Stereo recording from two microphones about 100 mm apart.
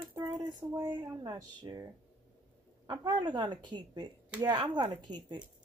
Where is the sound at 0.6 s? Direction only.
50° right (ahead or behind).